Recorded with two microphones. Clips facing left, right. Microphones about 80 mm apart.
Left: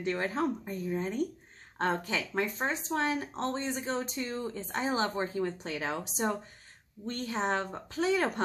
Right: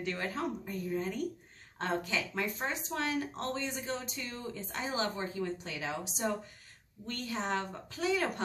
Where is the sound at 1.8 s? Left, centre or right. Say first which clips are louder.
Left 3 dB; left.